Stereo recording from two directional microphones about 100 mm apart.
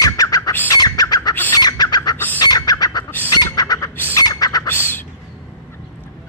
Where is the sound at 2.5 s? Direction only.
40° left (ahead or behind).